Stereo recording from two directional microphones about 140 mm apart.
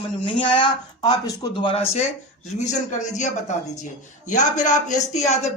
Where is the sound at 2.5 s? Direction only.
55° left (ahead or behind).